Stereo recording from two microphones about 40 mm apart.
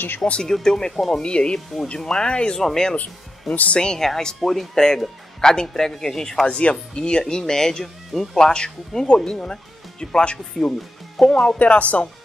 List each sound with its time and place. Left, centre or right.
0.4 s speech: centre
2.6 s speech: centre
3.0 s speech: left
3.8 s speech: centre
6.4 s speech: left
11.4 s speech: left